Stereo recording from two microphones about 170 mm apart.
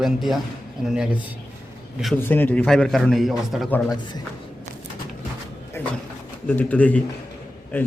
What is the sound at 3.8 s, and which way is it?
Speech, 25° left (ahead or behind).